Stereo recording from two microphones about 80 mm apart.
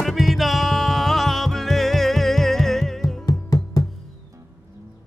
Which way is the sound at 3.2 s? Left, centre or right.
Left.